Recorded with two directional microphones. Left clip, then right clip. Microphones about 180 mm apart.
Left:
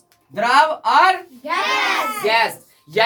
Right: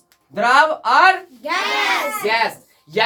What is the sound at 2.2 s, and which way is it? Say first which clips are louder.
Speech: left 3 dB; 20° left (ahead or behind).